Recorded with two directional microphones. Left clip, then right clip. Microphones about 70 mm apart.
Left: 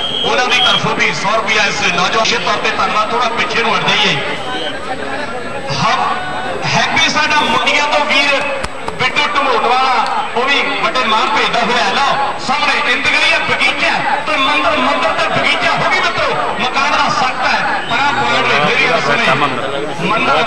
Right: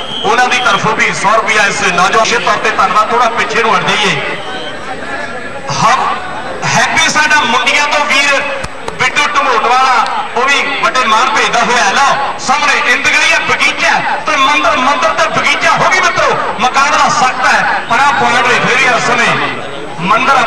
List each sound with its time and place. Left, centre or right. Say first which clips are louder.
0.2 s a man's voice: right 3 dB; right
6.7 s a man's voice: right 3 dB; right